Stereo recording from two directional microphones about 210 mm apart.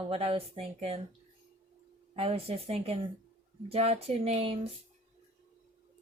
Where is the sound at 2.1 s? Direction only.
30° right (ahead or behind).